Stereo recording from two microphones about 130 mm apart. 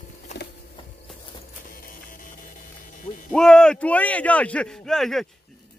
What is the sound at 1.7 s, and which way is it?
Music, 90° left.